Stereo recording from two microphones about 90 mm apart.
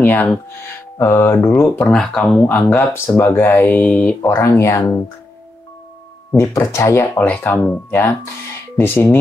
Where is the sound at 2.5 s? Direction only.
20° left (ahead or behind).